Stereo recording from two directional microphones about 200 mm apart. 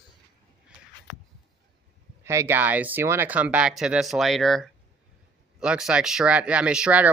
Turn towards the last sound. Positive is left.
turn(degrees=-5)  # may be behind; listen again after turning